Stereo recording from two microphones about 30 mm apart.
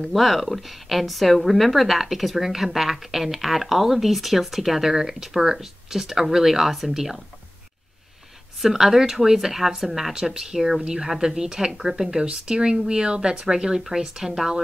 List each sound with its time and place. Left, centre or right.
0.1 s a woman's voice: centre
8.5 s speech: centre
10.1 s speech: centre
12.3 s speech: right; by 14.5 s centre